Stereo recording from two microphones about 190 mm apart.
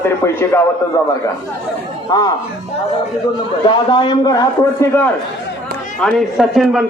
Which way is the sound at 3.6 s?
25° left (ahead or behind).